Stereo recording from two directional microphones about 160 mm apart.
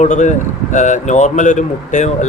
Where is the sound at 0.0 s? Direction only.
45° left (ahead or behind).